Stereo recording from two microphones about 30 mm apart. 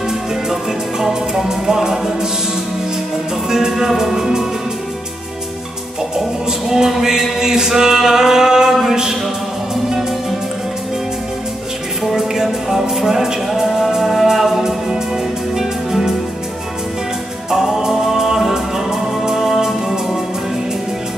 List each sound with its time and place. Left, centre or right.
0.3 s music: centre
3.4 s music: centre
6.1 s music: centre
7.3 s chant: centre
12.2 s music: centre
17.5 s music: centre